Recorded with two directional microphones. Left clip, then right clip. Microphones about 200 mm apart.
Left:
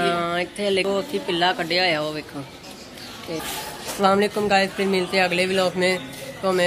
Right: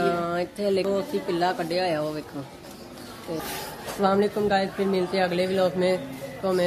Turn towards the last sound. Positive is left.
turn(degrees=5)  # may be behind; listen again after turning